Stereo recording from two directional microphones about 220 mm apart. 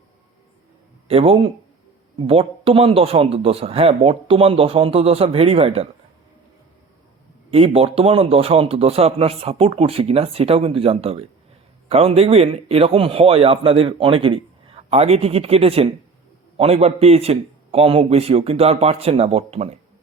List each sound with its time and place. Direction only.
1.0 s a man's voice: 25° right (ahead or behind)
7.5 s a man's voice: 25° right (ahead or behind)